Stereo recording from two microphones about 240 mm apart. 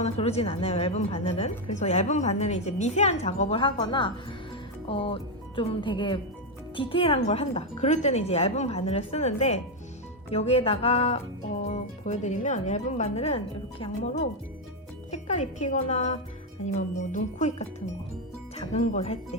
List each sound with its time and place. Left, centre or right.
0.0 s a woman's voice: left